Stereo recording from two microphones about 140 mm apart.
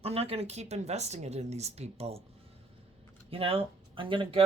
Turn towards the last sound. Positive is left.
turn(degrees=-40)  # may be behind; listen again after turning